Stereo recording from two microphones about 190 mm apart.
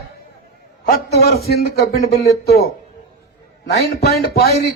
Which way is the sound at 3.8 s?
55° left (ahead or behind).